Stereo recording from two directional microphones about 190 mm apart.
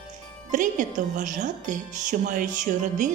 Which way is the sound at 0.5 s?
40° right (ahead or behind).